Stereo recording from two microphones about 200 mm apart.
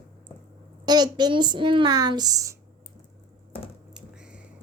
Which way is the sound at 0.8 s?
20° right (ahead or behind).